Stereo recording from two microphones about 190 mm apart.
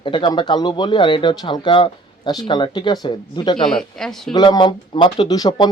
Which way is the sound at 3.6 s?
Centre (ahead or behind).